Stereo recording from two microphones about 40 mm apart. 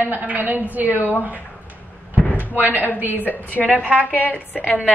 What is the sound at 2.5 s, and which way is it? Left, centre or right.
Speech, right.